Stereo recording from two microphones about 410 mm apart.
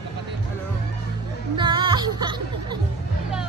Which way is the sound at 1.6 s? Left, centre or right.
Centre.